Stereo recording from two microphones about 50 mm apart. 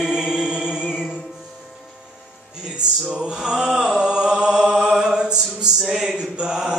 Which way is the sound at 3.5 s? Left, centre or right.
Centre.